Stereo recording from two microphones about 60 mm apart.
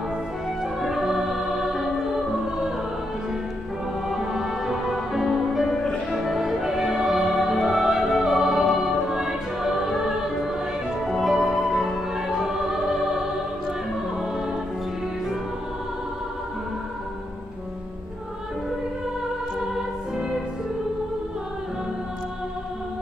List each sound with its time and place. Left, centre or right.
0.6 s music: centre
4.1 s music: centre